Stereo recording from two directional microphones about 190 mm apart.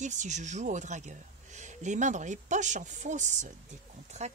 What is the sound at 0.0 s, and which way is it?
Speech, 40° right (ahead or behind).